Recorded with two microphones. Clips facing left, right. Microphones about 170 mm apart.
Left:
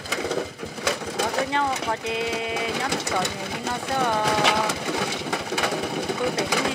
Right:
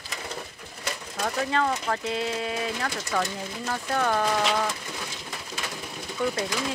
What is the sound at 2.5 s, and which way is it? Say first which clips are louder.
Speech: left 3 dB; 75° left (ahead or behind).